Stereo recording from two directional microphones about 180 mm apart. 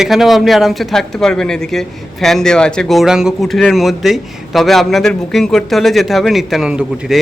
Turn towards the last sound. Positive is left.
turn(degrees=-5)  # may be behind; listen again after turning